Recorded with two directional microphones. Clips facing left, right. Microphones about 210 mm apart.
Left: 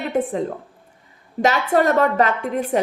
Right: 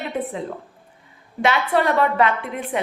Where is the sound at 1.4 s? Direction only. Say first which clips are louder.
Left 2 dB; 45° left (ahead or behind).